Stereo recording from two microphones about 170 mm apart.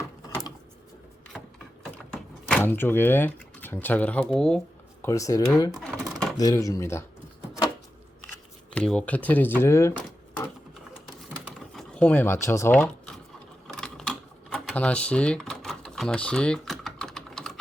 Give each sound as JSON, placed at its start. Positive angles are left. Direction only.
{"t": 2.5, "sound": "speech", "side_deg": 10}
{"t": 5.0, "sound": "speech", "side_deg": 20}
{"t": 5.7, "sound": "typing", "side_deg": 0}
{"t": 6.3, "sound": "speech", "side_deg": 20}
{"t": 8.7, "sound": "speech", "side_deg": 5}
{"t": 11.7, "sound": "speech", "side_deg": 5}
{"t": 13.7, "sound": "typing", "side_deg": 0}